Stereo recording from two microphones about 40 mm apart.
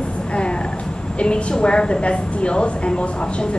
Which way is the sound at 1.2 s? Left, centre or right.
Left.